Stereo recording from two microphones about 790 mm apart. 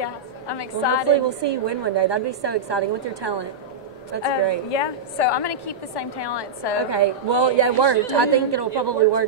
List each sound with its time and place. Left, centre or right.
0.0 s a woman's voice: left
1.0 s a woman's voice: right
4.7 s a woman's voice: left
6.9 s a woman's voice: right